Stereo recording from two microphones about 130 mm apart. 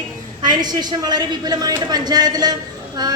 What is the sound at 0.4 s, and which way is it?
A man's voice, 35° right (ahead or behind).